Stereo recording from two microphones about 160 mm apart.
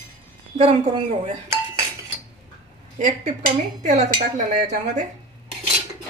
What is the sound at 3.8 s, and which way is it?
Speech, 50° right (ahead or behind).